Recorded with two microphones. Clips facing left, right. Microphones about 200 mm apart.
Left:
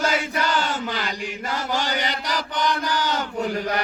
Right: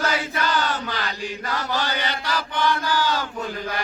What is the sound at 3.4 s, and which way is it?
Chant, 70° left (ahead or behind).